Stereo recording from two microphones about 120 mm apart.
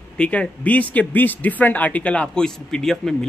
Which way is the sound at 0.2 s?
10° left (ahead or behind).